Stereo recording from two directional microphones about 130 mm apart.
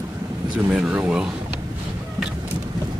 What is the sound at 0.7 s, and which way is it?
Speech, 10° right (ahead or behind).